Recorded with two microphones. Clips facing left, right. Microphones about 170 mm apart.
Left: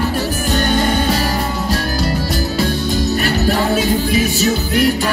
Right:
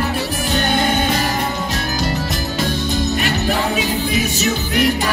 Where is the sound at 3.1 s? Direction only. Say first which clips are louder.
Left 3 dB; 40° left (ahead or behind).